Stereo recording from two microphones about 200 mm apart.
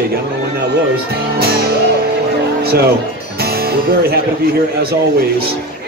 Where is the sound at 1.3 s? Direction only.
50° right (ahead or behind).